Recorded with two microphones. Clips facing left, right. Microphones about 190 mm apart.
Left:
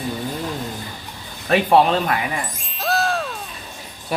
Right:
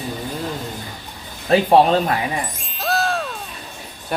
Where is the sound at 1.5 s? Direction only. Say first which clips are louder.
Right 2 dB; 35° right (ahead or behind).